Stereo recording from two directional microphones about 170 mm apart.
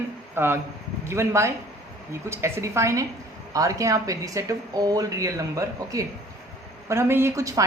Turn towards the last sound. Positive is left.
turn(degrees=-20)  # may be behind; listen again after turning